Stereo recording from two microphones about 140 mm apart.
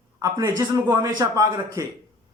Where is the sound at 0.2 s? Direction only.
25° right (ahead or behind).